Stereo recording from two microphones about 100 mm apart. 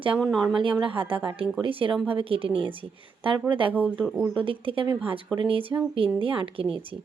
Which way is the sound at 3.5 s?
60° right (ahead or behind).